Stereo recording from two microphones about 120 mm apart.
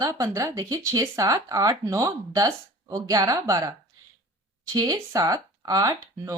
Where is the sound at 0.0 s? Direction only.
25° right (ahead or behind).